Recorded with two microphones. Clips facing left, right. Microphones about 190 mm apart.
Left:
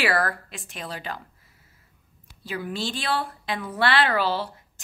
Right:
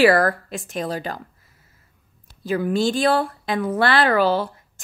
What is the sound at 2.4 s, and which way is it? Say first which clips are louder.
Speech: right 10 dB; 45° right (ahead or behind).